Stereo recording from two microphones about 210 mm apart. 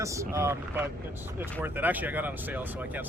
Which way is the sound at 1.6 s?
10° right (ahead or behind).